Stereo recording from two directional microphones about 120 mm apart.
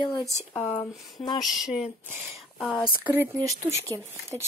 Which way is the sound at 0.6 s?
50° left (ahead or behind).